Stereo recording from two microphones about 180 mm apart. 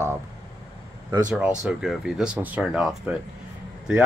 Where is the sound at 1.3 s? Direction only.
5° right (ahead or behind).